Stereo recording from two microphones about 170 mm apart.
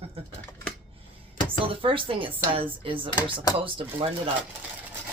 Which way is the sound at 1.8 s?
30° right (ahead or behind).